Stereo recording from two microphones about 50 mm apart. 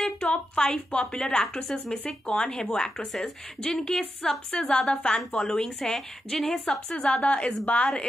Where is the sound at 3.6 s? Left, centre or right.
Centre.